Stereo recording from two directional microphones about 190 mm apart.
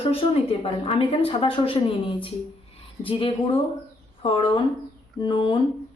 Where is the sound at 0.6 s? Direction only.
30° left (ahead or behind).